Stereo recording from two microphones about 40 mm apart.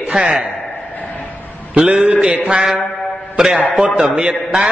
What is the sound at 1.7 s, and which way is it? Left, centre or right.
Speech, right.